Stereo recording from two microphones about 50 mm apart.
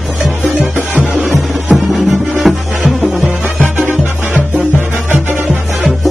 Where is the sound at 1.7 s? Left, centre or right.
Centre.